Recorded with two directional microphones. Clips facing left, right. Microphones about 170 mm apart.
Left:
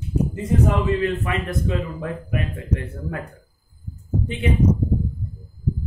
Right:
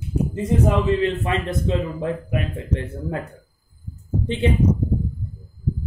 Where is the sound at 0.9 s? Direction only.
25° right (ahead or behind).